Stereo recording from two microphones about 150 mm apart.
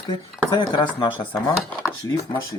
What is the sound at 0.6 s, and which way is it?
Speech, 30° left (ahead or behind).